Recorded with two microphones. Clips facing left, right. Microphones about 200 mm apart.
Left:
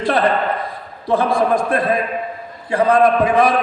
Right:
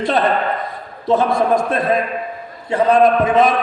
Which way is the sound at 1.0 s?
25° right (ahead or behind).